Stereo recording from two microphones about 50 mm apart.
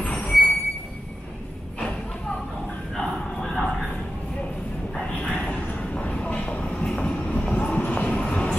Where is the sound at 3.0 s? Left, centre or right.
Centre.